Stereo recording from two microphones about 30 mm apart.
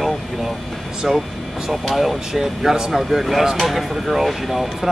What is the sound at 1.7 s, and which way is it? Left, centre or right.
A man's voice, centre.